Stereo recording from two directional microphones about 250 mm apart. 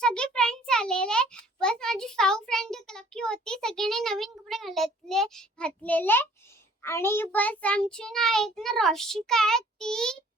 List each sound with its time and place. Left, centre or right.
0.0 s a child's voice: centre
6.8 s child singing: centre